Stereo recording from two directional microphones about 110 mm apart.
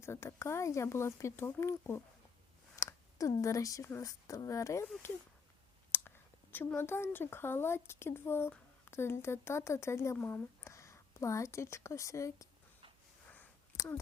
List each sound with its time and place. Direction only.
0.0 s speech: 25° left (ahead or behind)
2.7 s a sound: 25° left (ahead or behind)
4.0 s speech: 30° left (ahead or behind)
5.9 s speech: 20° left (ahead or behind)
13.7 s speech: 30° left (ahead or behind)